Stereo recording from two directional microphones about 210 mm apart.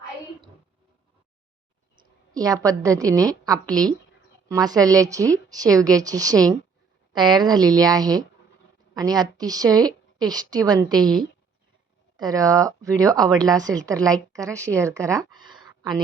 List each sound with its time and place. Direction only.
2.0 s a woman's voice: 15° right (ahead or behind)
12.1 s a woman's voice: 20° right (ahead or behind)